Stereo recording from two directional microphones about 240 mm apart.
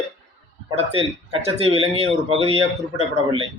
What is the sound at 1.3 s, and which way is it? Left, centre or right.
Speech, right.